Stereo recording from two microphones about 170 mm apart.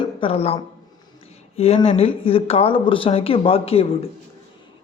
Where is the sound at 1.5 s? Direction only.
35° left (ahead or behind).